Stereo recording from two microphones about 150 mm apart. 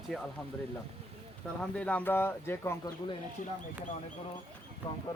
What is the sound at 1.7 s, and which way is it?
Speech, 10° left (ahead or behind).